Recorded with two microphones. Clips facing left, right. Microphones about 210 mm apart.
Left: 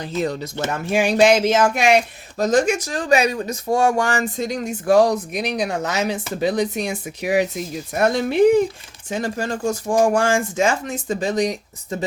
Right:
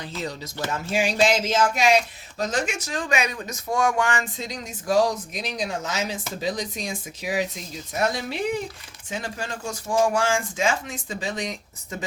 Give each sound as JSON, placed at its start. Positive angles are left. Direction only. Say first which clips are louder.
{"t": 0.2, "sound": "speech", "louder": "left 8 dB", "side_deg": 55}
{"t": 2.4, "sound": "speech", "louder": "left 9 dB", "side_deg": 45}
{"t": 4.4, "sound": "speech", "louder": "left 10 dB", "side_deg": 60}
{"t": 9.0, "sound": "speech", "louder": "left 8 dB", "side_deg": 45}